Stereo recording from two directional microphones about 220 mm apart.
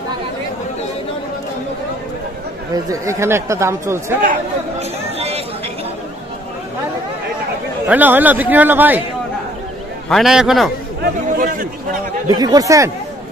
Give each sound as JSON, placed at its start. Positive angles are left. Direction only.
{"t": 2.7, "sound": "speech", "side_deg": -15}
{"t": 4.2, "sound": "chatter", "side_deg": -35}
{"t": 7.9, "sound": "speech", "side_deg": -10}
{"t": 10.0, "sound": "a man's voice", "side_deg": 0}
{"t": 11.0, "sound": "chatter", "side_deg": -40}
{"t": 12.3, "sound": "speech", "side_deg": -15}